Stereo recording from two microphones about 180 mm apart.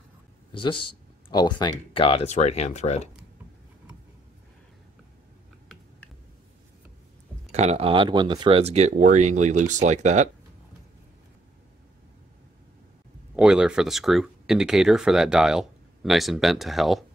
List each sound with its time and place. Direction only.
0.5 s speech: 25° left (ahead or behind)
7.5 s speech: 35° right (ahead or behind)
13.4 s speech: 5° right (ahead or behind)